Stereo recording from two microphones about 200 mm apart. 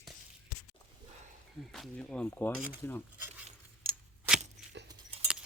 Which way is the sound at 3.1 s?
10° right (ahead or behind).